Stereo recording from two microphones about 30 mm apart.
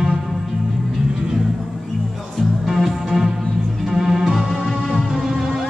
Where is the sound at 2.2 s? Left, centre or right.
Centre.